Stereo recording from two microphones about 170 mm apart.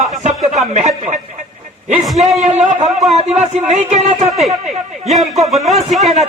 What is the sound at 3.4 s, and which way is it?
Speech, 40° right (ahead or behind).